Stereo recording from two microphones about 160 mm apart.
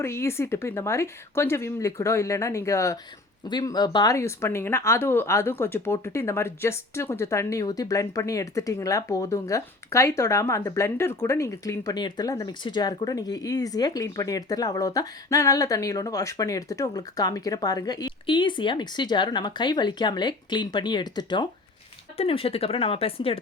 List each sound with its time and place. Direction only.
0.0 s a woman's voice: 15° left (ahead or behind); by 23.4 s 35° left (ahead or behind)